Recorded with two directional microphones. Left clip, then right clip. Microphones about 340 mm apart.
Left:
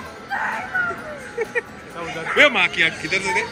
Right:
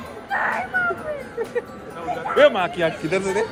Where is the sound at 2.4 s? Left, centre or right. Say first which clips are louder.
Left 1 dB; centre.